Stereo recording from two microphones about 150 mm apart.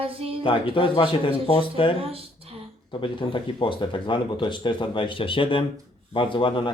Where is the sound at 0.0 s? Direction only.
40° right (ahead or behind).